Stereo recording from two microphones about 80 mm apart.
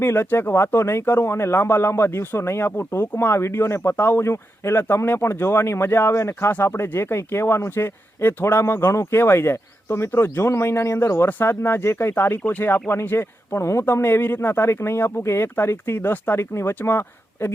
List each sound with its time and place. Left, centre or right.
0.0 s speech: left